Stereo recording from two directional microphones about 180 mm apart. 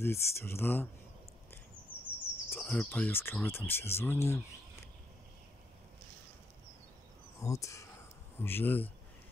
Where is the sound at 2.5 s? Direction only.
10° left (ahead or behind).